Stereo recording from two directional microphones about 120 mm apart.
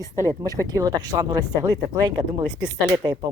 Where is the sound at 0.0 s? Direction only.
30° right (ahead or behind).